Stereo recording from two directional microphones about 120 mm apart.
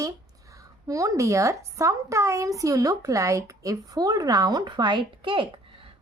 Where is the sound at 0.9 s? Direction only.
25° right (ahead or behind).